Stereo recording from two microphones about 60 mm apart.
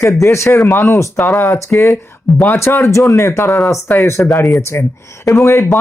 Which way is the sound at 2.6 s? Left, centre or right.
Left.